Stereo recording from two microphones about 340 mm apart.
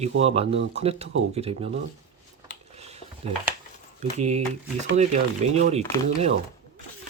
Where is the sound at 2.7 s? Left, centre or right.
Centre.